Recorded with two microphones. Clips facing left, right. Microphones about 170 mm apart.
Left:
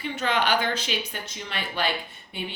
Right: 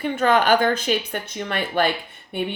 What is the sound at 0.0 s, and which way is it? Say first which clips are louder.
A woman's voice: right 7 dB; 50° right (ahead or behind).